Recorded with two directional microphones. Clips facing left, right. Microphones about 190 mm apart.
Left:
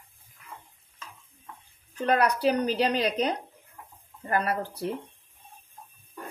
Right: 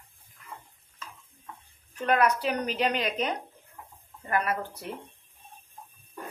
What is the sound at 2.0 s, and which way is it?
Speech, 35° left (ahead or behind).